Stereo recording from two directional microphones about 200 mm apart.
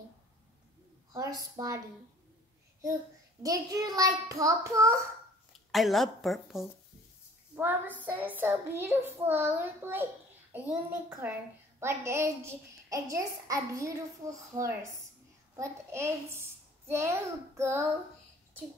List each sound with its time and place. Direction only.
1.1 s a woman's voice: 20° right (ahead or behind)
3.4 s a child's voice: 15° right (ahead or behind)
5.5 s a child's voice: centre (ahead or behind)